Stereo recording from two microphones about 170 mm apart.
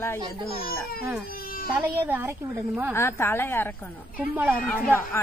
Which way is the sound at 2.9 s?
15° left (ahead or behind).